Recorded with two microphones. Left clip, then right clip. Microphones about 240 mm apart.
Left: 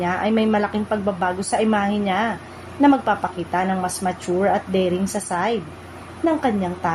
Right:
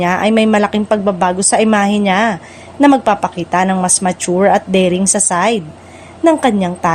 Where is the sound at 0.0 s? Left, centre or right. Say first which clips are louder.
Right 8 dB; right.